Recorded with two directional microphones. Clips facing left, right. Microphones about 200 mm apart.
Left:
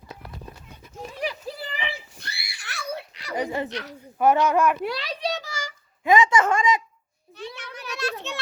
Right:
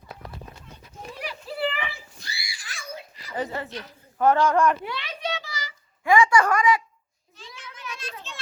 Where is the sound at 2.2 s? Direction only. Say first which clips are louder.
Even; 60° left (ahead or behind).